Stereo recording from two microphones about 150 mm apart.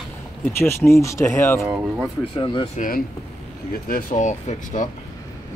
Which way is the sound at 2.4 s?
30° left (ahead or behind).